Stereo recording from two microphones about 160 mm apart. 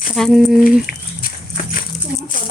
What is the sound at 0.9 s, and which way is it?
Speech, 70° left (ahead or behind).